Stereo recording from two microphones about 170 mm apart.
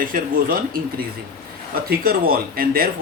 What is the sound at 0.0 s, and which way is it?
Speech, 55° right (ahead or behind).